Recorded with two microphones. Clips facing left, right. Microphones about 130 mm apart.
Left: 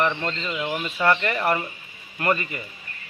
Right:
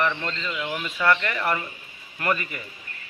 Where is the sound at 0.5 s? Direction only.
25° left (ahead or behind).